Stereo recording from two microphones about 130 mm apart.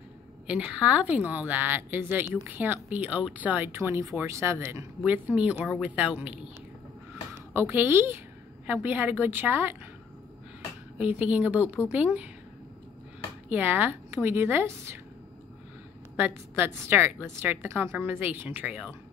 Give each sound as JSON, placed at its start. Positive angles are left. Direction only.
{"t": 0.5, "sound": "a woman's voice", "side_deg": -10}
{"t": 7.7, "sound": "a woman's voice", "side_deg": -20}
{"t": 11.0, "sound": "a woman's voice", "side_deg": -10}
{"t": 13.5, "sound": "a woman's voice", "side_deg": -15}
{"t": 16.2, "sound": "a woman's voice", "side_deg": -15}